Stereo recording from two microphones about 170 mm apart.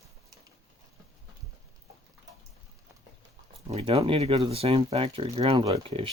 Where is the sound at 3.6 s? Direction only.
35° right (ahead or behind).